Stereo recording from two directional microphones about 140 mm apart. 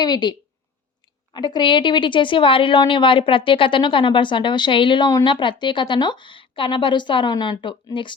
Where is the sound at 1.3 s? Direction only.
30° left (ahead or behind).